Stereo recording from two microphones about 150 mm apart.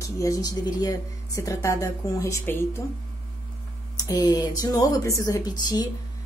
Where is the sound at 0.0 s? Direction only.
20° left (ahead or behind).